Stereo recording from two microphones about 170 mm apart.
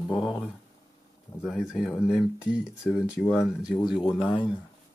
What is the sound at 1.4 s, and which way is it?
Speech, centre (ahead or behind).